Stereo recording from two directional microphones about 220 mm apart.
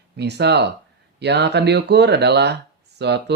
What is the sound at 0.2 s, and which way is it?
Speech, 50° right (ahead or behind).